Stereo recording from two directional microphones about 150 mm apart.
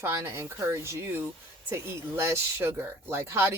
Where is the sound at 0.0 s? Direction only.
20° right (ahead or behind).